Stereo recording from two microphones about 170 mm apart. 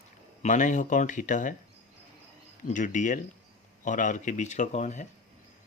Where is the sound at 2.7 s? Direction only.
50° left (ahead or behind).